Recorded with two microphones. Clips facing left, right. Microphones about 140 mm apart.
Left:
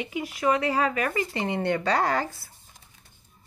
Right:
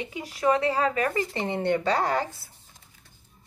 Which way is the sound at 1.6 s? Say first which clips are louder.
Right 1 dB; 20° right (ahead or behind).